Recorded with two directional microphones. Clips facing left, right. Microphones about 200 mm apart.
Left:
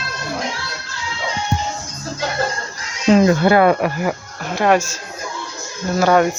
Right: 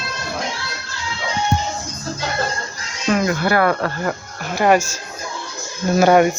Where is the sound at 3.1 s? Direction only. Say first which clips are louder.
Left 6 dB; 25° left (ahead or behind).